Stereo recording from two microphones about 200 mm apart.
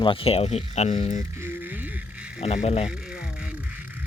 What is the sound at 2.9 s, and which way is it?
Music, 5° right (ahead or behind).